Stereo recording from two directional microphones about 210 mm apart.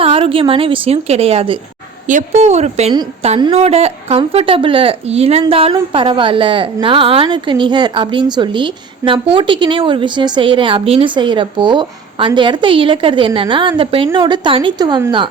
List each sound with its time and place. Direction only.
0.0 s a woman's voice: 25° right (ahead or behind)